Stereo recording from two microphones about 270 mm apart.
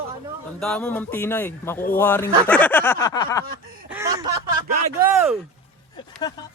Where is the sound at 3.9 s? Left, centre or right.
Centre.